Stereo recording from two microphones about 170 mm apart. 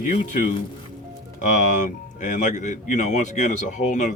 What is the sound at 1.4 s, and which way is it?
Speech, 45° left (ahead or behind).